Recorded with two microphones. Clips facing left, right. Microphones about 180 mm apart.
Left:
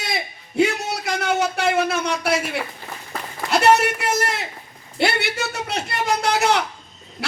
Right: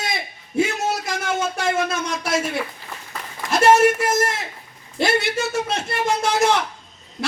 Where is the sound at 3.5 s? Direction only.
65° left (ahead or behind).